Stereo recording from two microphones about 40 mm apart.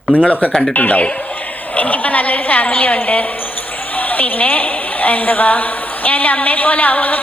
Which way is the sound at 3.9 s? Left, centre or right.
Left.